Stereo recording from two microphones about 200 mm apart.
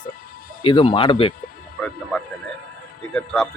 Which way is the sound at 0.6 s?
25° left (ahead or behind).